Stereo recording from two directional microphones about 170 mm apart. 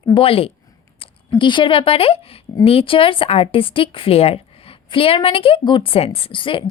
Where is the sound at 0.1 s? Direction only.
35° left (ahead or behind).